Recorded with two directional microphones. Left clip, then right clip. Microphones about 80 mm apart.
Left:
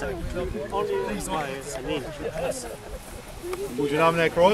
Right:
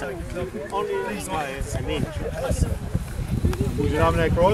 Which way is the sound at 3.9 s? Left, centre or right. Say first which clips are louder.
Left 1 dB; left.